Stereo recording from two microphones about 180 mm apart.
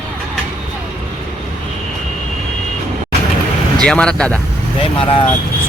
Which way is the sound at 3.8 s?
5° left (ahead or behind).